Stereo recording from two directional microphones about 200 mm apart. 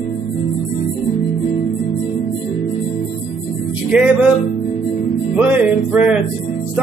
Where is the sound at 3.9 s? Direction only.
5° right (ahead or behind).